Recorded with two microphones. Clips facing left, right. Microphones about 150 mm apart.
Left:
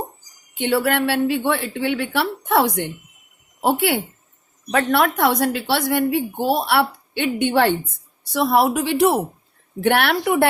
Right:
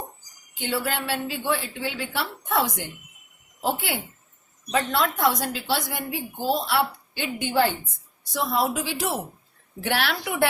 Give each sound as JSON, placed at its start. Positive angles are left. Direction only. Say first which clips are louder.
{"t": 0.6, "sound": "a woman's voice", "louder": "left 9 dB", "side_deg": 65}